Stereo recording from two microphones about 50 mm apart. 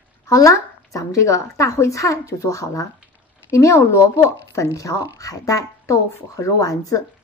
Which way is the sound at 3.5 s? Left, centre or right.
Left.